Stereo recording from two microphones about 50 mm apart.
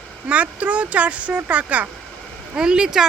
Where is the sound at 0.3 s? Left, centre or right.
Right.